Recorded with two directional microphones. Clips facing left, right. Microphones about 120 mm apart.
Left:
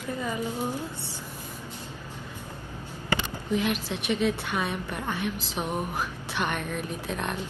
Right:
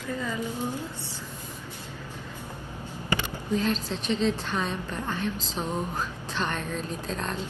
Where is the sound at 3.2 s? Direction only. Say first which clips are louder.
Even; 15° left (ahead or behind).